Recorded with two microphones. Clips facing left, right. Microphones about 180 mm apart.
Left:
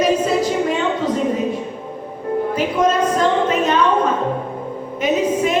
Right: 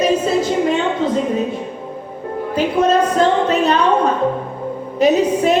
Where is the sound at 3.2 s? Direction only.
35° right (ahead or behind).